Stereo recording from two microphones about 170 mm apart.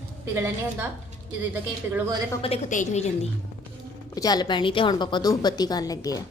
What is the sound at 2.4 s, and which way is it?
Speech, 40° left (ahead or behind).